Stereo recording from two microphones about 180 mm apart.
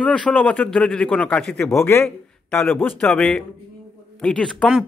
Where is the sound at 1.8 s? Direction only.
15° left (ahead or behind).